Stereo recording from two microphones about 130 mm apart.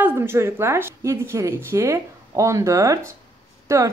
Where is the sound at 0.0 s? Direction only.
15° right (ahead or behind).